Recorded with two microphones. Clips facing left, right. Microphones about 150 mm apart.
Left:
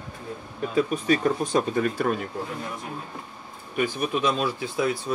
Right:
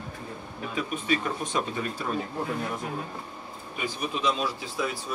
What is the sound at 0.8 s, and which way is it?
Speech, 35° left (ahead or behind).